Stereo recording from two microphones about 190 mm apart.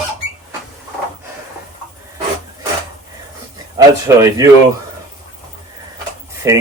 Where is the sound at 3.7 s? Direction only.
20° right (ahead or behind).